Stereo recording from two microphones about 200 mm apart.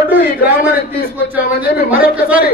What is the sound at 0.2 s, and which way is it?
Speech, 50° left (ahead or behind).